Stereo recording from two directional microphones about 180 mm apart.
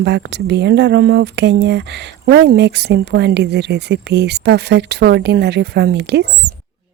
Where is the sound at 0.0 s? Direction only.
70° right (ahead or behind).